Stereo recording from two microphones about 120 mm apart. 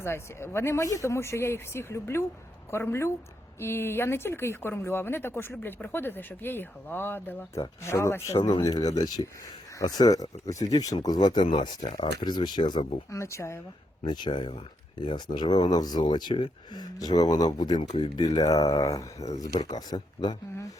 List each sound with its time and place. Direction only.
0.0 s speech: 20° left (ahead or behind)
8.5 s speech: 35° left (ahead or behind)
13.1 s speech: 25° left (ahead or behind)
14.0 s speech: 35° left (ahead or behind)